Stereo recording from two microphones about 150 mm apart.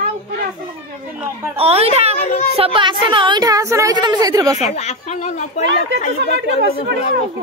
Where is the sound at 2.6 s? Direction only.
35° right (ahead or behind).